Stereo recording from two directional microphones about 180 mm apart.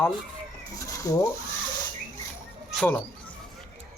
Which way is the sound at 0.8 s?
20° left (ahead or behind).